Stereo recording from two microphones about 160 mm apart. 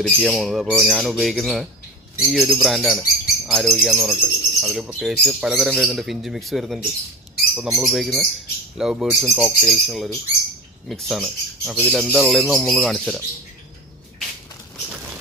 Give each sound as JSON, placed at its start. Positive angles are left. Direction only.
{"t": 0.0, "sound": "speech", "side_deg": 0}